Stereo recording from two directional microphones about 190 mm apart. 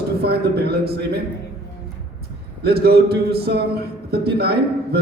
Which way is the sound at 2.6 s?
55° right (ahead or behind).